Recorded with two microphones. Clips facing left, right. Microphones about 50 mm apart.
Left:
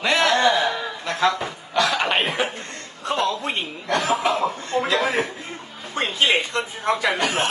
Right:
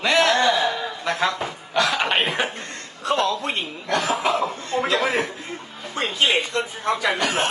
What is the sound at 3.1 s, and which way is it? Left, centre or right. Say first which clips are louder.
Speech: right 1 dB; centre.